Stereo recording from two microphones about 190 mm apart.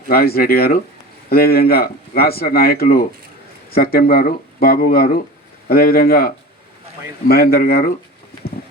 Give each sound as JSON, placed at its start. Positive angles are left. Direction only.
{"t": 0.1, "sound": "speech", "side_deg": 55}